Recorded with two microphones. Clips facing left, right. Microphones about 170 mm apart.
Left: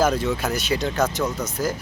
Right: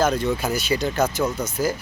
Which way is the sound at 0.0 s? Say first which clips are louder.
Even; 5° left (ahead or behind).